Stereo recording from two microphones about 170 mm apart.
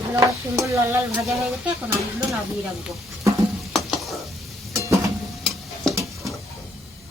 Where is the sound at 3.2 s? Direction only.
15° right (ahead or behind).